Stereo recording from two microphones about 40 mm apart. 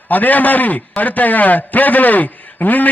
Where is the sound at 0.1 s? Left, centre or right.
Left.